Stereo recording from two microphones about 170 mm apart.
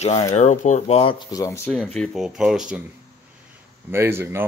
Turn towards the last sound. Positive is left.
turn(degrees=-15)  # may be behind; listen again after turning